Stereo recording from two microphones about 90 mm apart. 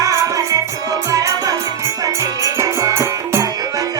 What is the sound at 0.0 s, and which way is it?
Music, 40° right (ahead or behind).